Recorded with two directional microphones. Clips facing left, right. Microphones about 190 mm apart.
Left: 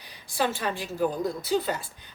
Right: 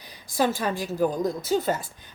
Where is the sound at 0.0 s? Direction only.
40° right (ahead or behind).